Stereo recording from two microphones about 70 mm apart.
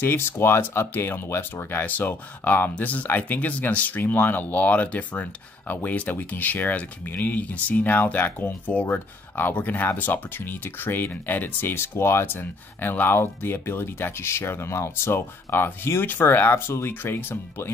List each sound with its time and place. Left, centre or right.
0.0 s speech: left